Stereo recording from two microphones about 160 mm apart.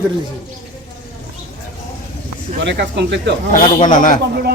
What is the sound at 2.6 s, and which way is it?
Speech, 90° right.